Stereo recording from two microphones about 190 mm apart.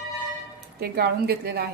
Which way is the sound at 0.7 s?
55° right (ahead or behind).